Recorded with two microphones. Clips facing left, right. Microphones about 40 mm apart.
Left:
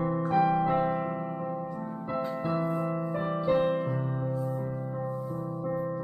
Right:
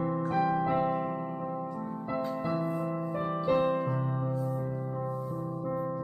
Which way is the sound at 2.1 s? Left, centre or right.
Centre.